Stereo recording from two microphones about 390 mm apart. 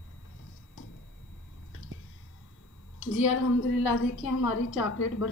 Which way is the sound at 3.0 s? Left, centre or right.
Left.